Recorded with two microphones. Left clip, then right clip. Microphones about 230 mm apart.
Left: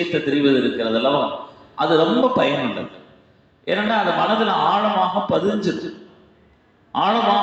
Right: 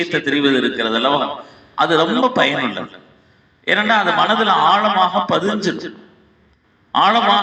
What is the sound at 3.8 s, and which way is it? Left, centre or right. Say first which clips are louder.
A man's voice: right 3 dB; right.